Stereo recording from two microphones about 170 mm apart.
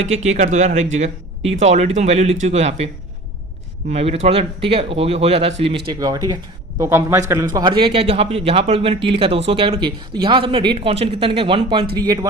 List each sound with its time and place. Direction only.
0.0 s speech: 40° right (ahead or behind); by 7.4 s 15° right (ahead or behind)
7.5 s speech: 30° right (ahead or behind)